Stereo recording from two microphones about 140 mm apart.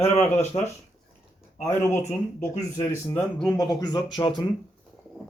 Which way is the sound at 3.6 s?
25° left (ahead or behind).